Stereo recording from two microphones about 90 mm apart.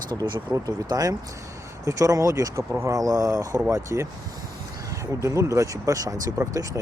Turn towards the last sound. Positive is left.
turn(degrees=-35)  # may be behind; listen again after turning